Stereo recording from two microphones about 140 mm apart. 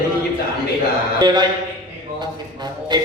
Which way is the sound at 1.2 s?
30° right (ahead or behind).